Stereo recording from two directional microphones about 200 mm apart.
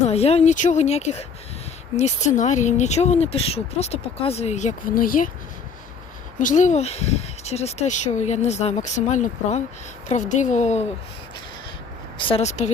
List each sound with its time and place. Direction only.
0.0 s speech: 30° left (ahead or behind)
6.4 s speech: 40° left (ahead or behind)
12.1 s speech: 25° left (ahead or behind)